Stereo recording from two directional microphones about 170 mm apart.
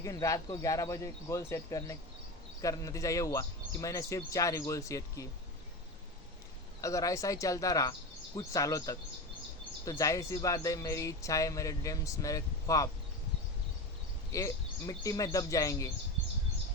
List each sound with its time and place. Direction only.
0.0 s speech: 20° left (ahead or behind)
6.8 s speech: 20° left (ahead or behind)
14.3 s speech: 20° left (ahead or behind)